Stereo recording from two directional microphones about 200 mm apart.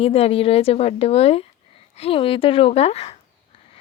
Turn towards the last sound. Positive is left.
turn(degrees=30)  # may be behind; listen again after turning